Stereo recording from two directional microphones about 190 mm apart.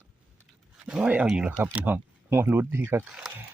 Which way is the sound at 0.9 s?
5° right (ahead or behind).